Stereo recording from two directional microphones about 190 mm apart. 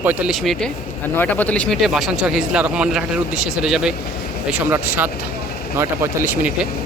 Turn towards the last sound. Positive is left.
turn(degrees=-15)  # may be behind; listen again after turning